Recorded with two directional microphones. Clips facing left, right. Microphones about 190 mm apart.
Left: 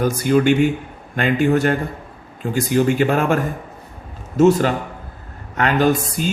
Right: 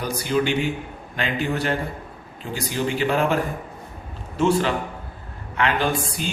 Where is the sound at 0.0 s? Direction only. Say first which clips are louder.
Left 7 dB; 50° left (ahead or behind).